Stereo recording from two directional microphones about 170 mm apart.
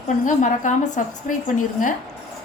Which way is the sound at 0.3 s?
45° left (ahead or behind).